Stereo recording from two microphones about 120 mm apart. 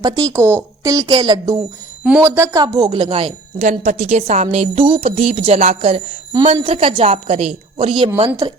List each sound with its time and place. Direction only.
0.0 s a woman's voice: 30° right (ahead or behind)
2.2 s speech: 25° right (ahead or behind)
3.0 s speech: 50° right (ahead or behind)
3.7 s a woman's voice: 80° right; by 8.1 s 50° right (ahead or behind)